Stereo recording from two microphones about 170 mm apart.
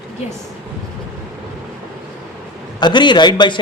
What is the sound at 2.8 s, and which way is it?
Speech, 25° left (ahead or behind).